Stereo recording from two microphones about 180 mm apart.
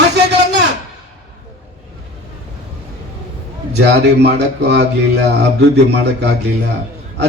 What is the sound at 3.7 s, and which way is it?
A man's voice, 70° right (ahead or behind).